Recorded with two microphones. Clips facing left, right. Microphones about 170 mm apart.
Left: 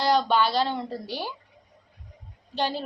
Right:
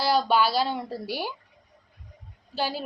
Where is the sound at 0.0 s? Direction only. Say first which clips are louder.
Even; 10° right (ahead or behind).